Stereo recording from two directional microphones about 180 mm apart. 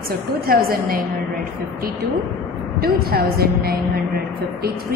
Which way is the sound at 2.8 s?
55° right (ahead or behind).